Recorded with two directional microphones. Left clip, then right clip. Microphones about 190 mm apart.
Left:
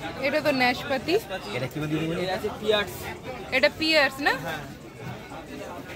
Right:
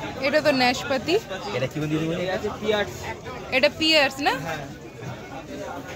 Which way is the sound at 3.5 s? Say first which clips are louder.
Right 2 dB; 5° right (ahead or behind).